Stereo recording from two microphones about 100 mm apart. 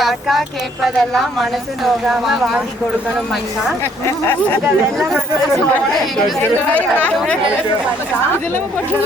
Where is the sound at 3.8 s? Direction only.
25° left (ahead or behind).